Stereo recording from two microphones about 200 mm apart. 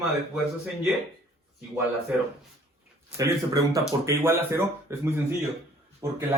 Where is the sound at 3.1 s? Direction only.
15° right (ahead or behind).